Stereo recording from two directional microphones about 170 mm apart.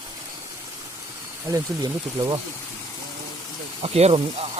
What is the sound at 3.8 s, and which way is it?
Speech, 35° right (ahead or behind).